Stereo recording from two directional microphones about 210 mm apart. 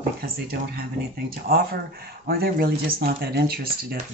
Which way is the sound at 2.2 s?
45° right (ahead or behind).